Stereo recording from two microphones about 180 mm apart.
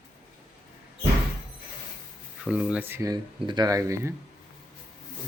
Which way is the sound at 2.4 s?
5° right (ahead or behind).